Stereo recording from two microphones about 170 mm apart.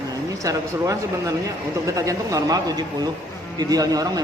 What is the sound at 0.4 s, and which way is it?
Speech, 20° right (ahead or behind).